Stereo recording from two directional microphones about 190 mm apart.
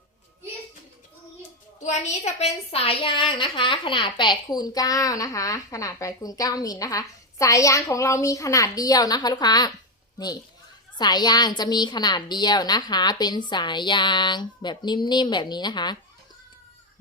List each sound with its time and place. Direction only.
1.8 s a woman's voice: 35° left (ahead or behind); by 9.7 s 20° left (ahead or behind)
10.9 s a woman's voice: 20° left (ahead or behind)